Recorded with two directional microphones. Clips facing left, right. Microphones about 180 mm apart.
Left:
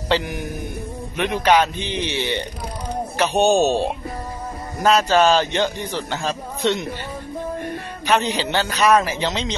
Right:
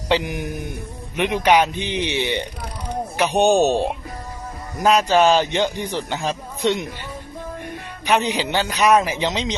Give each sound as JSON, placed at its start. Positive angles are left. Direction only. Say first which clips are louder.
{"t": 0.1, "sound": "a man's voice", "louder": "right 1 dB", "side_deg": -15}
{"t": 8.0, "sound": "a man's voice", "louder": "even", "side_deg": -15}